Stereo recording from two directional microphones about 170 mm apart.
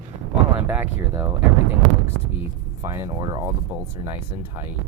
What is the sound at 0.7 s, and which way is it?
Speech, 10° right (ahead or behind).